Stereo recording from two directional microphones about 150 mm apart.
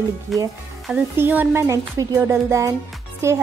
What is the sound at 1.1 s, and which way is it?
Speech, 15° right (ahead or behind).